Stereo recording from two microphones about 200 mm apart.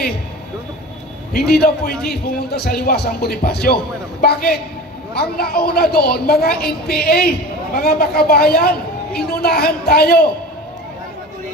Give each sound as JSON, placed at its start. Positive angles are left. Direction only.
{"t": 1.5, "sound": "speech", "side_deg": 50}